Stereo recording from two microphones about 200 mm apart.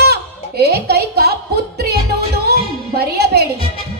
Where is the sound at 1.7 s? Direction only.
50° right (ahead or behind).